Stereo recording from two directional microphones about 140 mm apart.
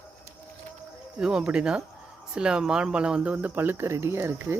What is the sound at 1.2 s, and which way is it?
Speech, 5° right (ahead or behind).